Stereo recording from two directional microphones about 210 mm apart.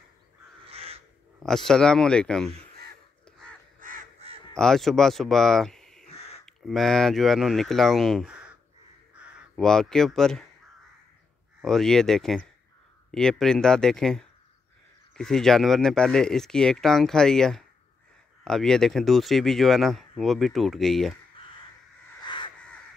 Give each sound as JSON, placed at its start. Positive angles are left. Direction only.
{"t": 0.7, "sound": "crow", "side_deg": -30}
{"t": 1.4, "sound": "speech", "side_deg": 0}
{"t": 3.8, "sound": "crow", "side_deg": -30}
{"t": 4.6, "sound": "speech", "side_deg": 0}
{"t": 6.0, "sound": "crow", "side_deg": 30}
{"t": 6.4, "sound": "speech", "side_deg": 0}
{"t": 11.6, "sound": "speech", "side_deg": 0}
{"t": 22.2, "sound": "crow", "side_deg": 20}